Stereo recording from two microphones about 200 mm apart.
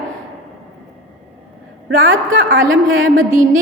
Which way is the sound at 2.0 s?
70° right (ahead or behind).